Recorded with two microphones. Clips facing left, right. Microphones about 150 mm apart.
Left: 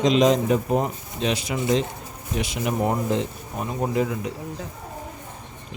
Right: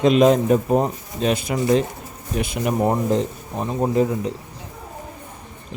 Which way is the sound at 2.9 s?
35° right (ahead or behind).